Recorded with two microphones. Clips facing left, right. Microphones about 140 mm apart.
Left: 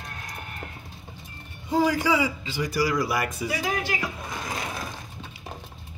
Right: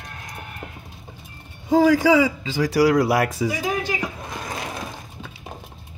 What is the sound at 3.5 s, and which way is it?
Music, 20° right (ahead or behind).